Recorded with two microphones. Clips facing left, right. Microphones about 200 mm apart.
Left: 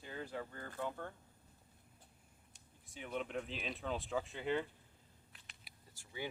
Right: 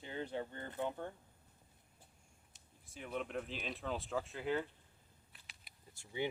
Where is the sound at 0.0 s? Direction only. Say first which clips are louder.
Right 3 dB; 25° right (ahead or behind).